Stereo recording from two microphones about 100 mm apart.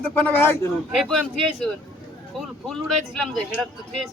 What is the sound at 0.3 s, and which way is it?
Speech, 25° left (ahead or behind).